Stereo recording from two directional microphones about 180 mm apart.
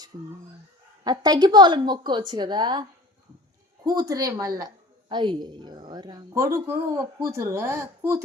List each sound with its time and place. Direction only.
0.1 s a woman's voice: 15° right (ahead or behind)
3.8 s a woman's voice: 20° right (ahead or behind)